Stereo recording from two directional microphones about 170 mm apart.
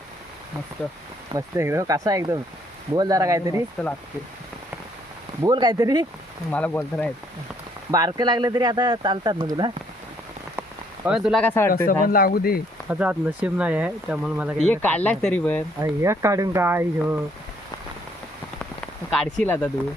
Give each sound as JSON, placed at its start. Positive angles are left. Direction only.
{"t": 1.3, "sound": "speech", "side_deg": -15}
{"t": 5.4, "sound": "speech", "side_deg": -25}
{"t": 6.5, "sound": "speech", "side_deg": 10}
{"t": 7.9, "sound": "speech", "side_deg": -20}
{"t": 11.1, "sound": "speech", "side_deg": -5}
{"t": 11.4, "sound": "speech", "side_deg": 15}
{"t": 11.9, "sound": "speech", "side_deg": 60}
{"t": 12.9, "sound": "speech", "side_deg": -10}
{"t": 14.6, "sound": "speech", "side_deg": 10}
{"t": 15.8, "sound": "speech", "side_deg": -15}
{"t": 19.1, "sound": "speech", "side_deg": 5}